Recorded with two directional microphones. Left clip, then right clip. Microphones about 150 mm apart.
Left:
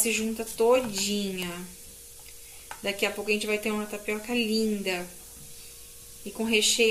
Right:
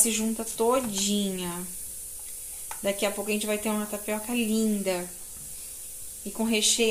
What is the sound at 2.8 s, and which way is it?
Speech, 40° right (ahead or behind).